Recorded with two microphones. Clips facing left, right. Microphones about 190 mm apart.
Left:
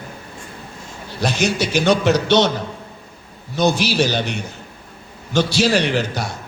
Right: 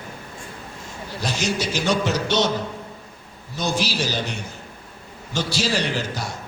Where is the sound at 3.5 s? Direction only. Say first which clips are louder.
Left 7 dB; 65° left (ahead or behind).